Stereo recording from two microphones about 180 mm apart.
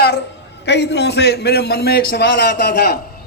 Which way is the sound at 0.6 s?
70° left (ahead or behind).